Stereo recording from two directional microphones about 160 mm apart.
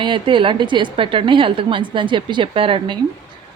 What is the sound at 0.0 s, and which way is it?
A woman's voice, 30° right (ahead or behind).